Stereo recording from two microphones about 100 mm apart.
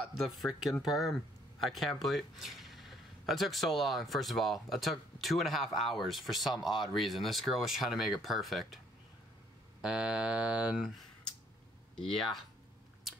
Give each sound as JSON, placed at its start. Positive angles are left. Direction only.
{"t": 0.4, "sound": "speech", "side_deg": -5}
{"t": 11.9, "sound": "speech", "side_deg": 5}